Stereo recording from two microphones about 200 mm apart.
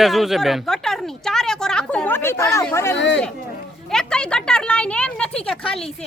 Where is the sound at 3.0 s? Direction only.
60° left (ahead or behind).